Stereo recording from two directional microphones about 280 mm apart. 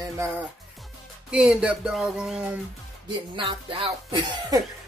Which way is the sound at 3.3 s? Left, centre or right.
Centre.